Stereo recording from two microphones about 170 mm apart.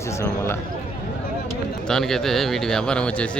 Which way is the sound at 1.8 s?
5° left (ahead or behind).